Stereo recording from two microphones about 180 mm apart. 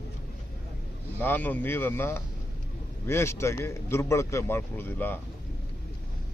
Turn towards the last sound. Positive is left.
turn(degrees=10)  # may be behind; listen again after turning